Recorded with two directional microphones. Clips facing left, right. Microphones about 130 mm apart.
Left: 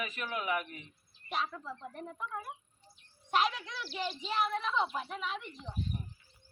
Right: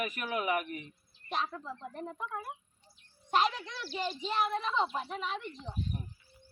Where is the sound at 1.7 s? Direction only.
25° right (ahead or behind).